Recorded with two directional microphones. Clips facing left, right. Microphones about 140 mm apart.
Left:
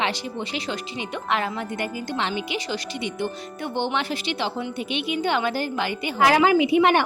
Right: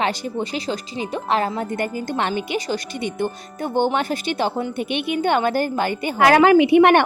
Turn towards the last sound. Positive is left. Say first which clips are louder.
# right 5 dB
turn(degrees=-60)  # may be behind; listen again after turning